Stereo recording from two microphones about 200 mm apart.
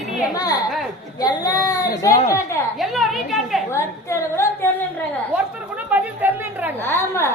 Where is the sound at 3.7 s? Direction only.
15° left (ahead or behind).